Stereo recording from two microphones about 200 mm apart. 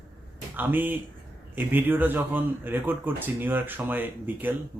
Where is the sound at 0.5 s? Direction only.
10° right (ahead or behind).